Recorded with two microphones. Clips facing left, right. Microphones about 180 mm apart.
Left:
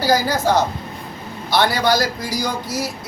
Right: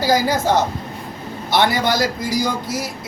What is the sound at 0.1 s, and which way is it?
A man's voice, 20° right (ahead or behind).